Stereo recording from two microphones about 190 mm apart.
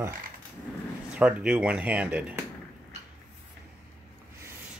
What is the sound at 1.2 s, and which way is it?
Speech, 5° right (ahead or behind).